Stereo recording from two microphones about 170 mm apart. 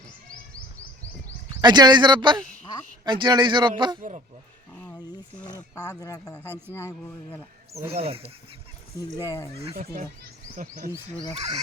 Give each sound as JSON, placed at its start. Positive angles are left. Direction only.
{"t": 1.6, "sound": "a man's voice", "side_deg": -25}
{"t": 5.5, "sound": "speech", "side_deg": 15}
{"t": 7.7, "sound": "speech", "side_deg": -40}
{"t": 9.2, "sound": "speech", "side_deg": 20}
{"t": 9.7, "sound": "speech", "side_deg": -55}